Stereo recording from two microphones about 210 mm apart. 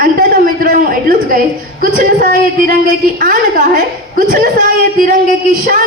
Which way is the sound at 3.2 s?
40° right (ahead or behind).